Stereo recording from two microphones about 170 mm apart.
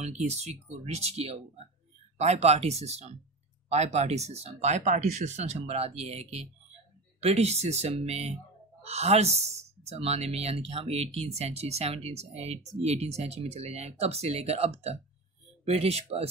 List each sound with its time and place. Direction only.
0.0 s speech: 40° right (ahead or behind)